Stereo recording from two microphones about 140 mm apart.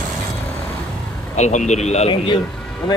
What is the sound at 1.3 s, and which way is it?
Speech, 55° left (ahead or behind).